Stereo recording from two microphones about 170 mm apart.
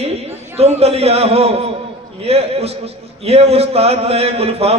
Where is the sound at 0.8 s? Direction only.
35° right (ahead or behind).